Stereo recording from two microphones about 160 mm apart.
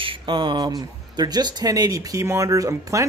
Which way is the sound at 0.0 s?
30° right (ahead or behind).